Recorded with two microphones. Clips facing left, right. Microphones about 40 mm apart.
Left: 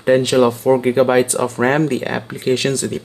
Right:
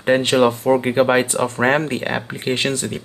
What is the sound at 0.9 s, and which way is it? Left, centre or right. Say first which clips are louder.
Speech: left 2 dB; right.